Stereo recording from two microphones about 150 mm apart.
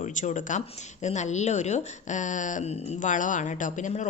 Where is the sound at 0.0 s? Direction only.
55° left (ahead or behind).